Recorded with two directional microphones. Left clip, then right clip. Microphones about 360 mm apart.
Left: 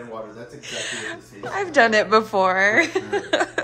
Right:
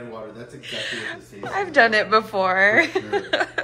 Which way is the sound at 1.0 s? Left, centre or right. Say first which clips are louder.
Even; centre.